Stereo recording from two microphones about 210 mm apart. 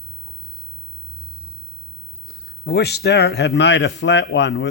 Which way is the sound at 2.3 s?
55° left (ahead or behind).